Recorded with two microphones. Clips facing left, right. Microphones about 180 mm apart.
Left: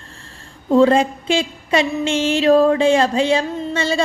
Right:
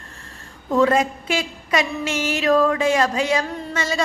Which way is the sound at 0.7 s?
30° left (ahead or behind).